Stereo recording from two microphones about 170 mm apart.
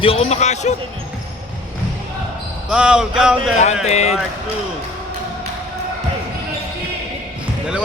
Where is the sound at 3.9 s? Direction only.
40° left (ahead or behind).